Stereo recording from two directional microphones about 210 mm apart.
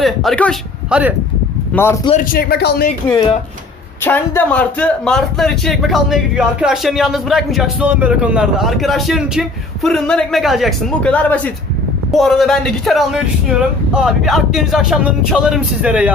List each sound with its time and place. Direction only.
0.0 s a man's voice: centre (ahead or behind)
1.7 s speech: 10° left (ahead or behind)
2.0 s speech: 40° left (ahead or behind)
4.0 s a man's voice: 10° left (ahead or behind); by 16.1 s 5° right (ahead or behind)